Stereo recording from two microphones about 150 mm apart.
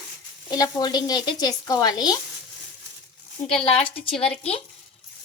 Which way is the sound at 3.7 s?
40° left (ahead or behind).